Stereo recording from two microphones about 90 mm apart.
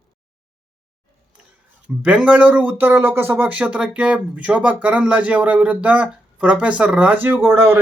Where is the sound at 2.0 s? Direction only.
15° right (ahead or behind).